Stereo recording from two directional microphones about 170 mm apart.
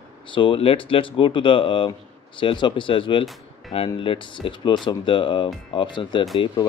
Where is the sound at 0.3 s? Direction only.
30° left (ahead or behind).